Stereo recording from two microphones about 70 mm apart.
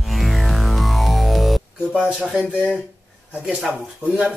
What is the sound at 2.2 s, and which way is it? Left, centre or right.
Speech, centre.